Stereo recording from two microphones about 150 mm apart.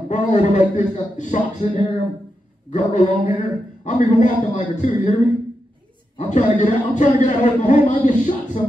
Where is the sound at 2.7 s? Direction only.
55° left (ahead or behind).